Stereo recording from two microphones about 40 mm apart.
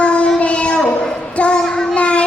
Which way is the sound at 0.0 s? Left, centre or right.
Left.